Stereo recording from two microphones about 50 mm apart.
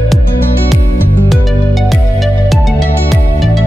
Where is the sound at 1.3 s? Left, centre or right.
Centre.